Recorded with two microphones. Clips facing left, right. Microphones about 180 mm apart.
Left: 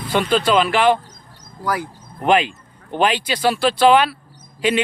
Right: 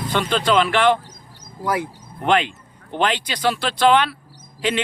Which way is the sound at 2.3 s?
10° left (ahead or behind).